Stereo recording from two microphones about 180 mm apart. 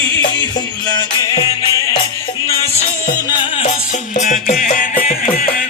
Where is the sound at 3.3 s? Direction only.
35° left (ahead or behind).